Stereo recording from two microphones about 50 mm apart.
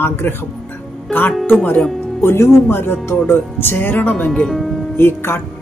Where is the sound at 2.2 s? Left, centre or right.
Left.